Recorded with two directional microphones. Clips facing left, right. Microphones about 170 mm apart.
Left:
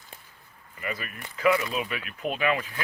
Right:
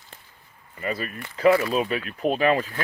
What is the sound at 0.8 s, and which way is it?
Speech, 35° right (ahead or behind).